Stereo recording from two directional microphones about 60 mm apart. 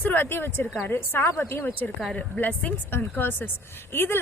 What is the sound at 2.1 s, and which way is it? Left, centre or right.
Speech, left.